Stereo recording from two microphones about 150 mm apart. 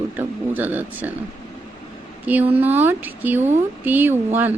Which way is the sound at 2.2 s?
10° right (ahead or behind).